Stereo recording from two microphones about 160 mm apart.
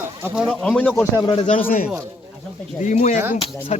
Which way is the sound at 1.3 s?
45° left (ahead or behind).